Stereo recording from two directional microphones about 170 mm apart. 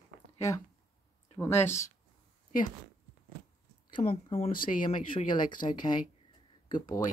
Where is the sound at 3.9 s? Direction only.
35° left (ahead or behind).